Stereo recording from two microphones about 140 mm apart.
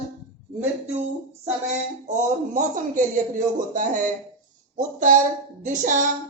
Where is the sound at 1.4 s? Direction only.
55° right (ahead or behind).